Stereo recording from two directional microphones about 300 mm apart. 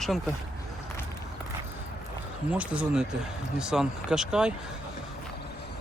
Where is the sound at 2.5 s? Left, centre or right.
Centre.